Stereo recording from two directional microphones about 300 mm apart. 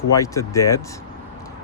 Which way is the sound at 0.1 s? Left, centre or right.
Centre.